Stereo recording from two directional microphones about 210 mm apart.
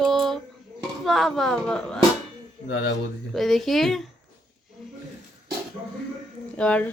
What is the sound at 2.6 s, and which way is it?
Speech, 55° left (ahead or behind).